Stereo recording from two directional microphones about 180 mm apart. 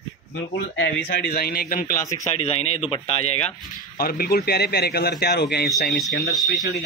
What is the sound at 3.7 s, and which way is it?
A man's voice, 55° left (ahead or behind).